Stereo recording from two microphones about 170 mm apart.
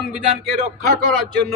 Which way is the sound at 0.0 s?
Centre (ahead or behind).